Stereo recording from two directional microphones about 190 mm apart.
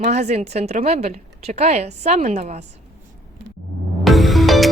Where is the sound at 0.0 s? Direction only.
35° right (ahead or behind).